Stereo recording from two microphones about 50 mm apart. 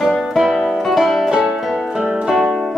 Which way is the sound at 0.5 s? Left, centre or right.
Centre.